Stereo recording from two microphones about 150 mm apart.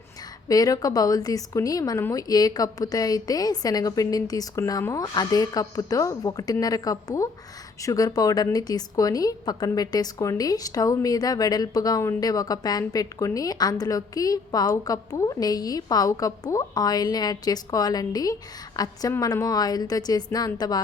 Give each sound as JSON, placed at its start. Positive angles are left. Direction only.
{"t": 0.4, "sound": "a woman's voice", "side_deg": 25}